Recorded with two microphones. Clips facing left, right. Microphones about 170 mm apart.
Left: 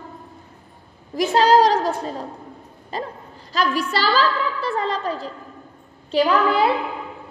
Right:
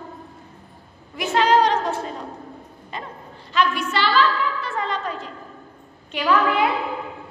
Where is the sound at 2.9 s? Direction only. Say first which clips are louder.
Left 6 dB; 35° left (ahead or behind).